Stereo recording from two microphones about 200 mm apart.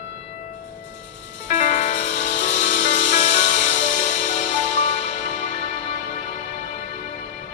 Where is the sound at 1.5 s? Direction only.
40° left (ahead or behind).